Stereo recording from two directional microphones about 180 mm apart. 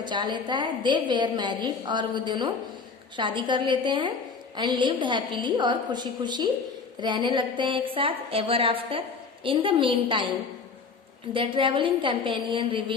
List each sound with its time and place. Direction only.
0.0 s a woman's voice: 25° right (ahead or behind)
11.3 s a woman's voice: 30° right (ahead or behind)